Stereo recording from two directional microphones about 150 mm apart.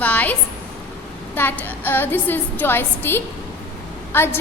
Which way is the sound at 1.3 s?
15° left (ahead or behind).